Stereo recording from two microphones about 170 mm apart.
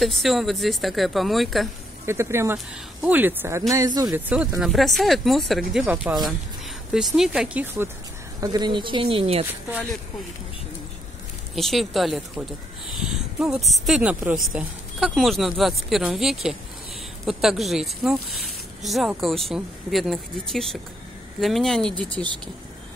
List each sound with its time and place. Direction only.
0.0 s speech: centre (ahead or behind)
2.0 s speech: 15° right (ahead or behind)
4.1 s speech: 10° right (ahead or behind)
8.4 s speech: 25° right (ahead or behind)
11.5 s speech: centre (ahead or behind)